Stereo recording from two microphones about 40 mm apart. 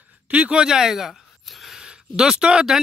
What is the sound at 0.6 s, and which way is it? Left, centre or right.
Speech, centre.